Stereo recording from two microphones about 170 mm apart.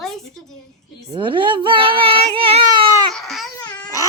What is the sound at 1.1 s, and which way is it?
Speech, 30° right (ahead or behind).